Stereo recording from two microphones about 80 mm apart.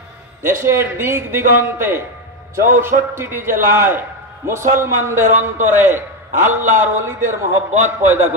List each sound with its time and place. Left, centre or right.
0.4 s a man's voice: right